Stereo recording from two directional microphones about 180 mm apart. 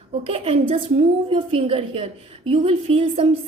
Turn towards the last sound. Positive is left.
turn(degrees=-30)  # may be behind; listen again after turning